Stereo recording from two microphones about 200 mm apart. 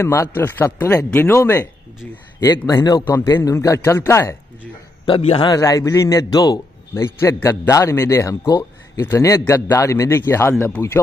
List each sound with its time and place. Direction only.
0.0 s a man's voice: 10° left (ahead or behind)
5.0 s a man's voice: 30° left (ahead or behind)
5.5 s a man's voice: 15° left (ahead or behind)